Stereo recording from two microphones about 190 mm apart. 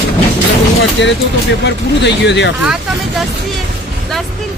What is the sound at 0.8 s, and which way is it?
A man's voice, 70° left (ahead or behind).